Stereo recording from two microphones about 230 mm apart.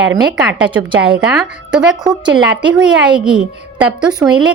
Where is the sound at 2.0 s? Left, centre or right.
Centre.